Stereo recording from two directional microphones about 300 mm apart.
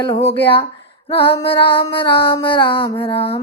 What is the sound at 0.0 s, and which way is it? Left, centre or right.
Music, centre.